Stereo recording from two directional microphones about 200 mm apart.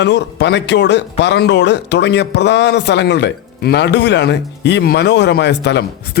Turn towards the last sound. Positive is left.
turn(degrees=60)  # may be behind; listen again after turning